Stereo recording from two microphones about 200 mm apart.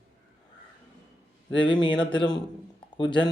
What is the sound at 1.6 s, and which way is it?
Speech, 25° left (ahead or behind).